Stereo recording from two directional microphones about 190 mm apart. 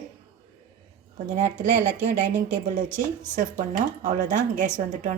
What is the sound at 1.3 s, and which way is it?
A woman's voice, 40° right (ahead or behind).